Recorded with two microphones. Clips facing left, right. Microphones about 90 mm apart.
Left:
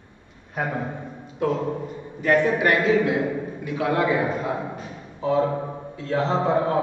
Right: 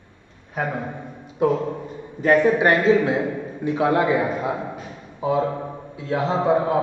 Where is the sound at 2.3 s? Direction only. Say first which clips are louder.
Right 3 dB; 25° right (ahead or behind).